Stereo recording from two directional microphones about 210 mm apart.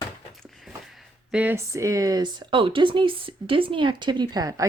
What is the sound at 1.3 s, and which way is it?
A woman's voice, 5° right (ahead or behind).